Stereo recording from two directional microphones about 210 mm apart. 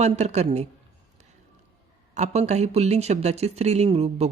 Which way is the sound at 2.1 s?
35° right (ahead or behind).